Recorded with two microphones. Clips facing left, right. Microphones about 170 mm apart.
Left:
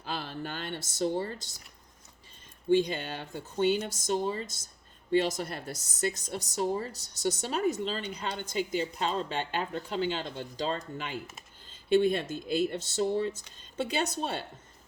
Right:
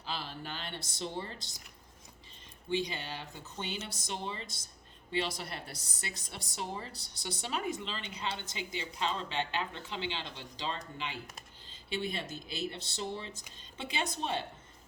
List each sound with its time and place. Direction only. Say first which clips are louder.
0.0 s speech: left 5 dB; 50° left (ahead or behind)
2.6 s a woman's voice: left 9 dB; 50° left (ahead or behind)